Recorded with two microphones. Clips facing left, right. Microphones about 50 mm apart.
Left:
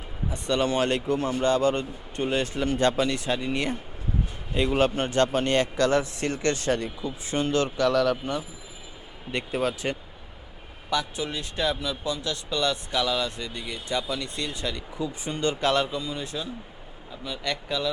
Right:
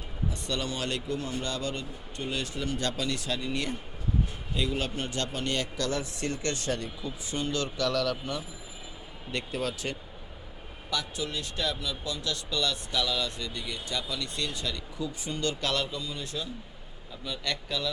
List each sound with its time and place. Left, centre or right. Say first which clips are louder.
0.3 s a man's voice: left 8 dB; left; by 17.9 s centre